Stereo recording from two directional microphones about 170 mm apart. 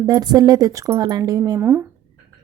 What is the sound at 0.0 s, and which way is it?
A woman's voice, 25° right (ahead or behind).